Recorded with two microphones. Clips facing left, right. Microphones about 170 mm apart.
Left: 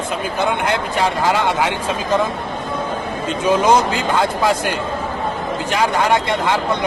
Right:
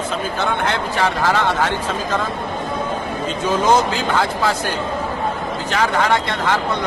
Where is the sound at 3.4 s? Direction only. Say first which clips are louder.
Left 2 dB; 15° left (ahead or behind).